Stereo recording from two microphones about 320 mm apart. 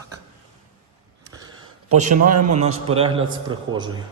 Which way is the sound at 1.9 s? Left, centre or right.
Right.